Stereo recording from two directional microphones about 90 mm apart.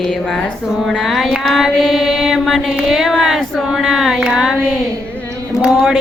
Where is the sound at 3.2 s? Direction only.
Centre (ahead or behind).